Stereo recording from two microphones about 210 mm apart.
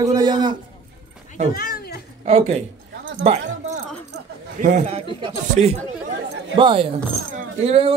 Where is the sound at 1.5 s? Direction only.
45° left (ahead or behind).